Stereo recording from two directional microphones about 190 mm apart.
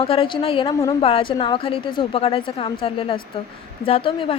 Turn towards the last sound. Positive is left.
turn(degrees=30)  # may be behind; listen again after turning